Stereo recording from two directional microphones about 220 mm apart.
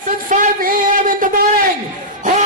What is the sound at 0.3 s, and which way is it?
Music, 35° right (ahead or behind).